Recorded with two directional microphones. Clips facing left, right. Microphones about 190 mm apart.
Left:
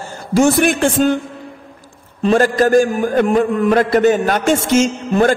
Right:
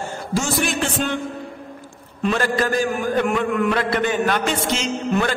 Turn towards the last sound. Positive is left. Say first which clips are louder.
# left 7 dB
turn(degrees=45)  # may be behind; listen again after turning